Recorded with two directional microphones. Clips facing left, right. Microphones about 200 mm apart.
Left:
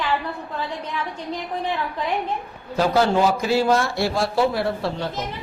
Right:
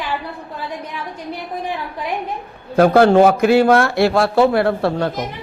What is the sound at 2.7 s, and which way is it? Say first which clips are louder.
Speech: right 8 dB; 55° right (ahead or behind).